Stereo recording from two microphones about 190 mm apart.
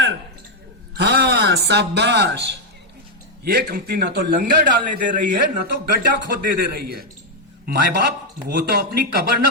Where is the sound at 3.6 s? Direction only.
50° right (ahead or behind).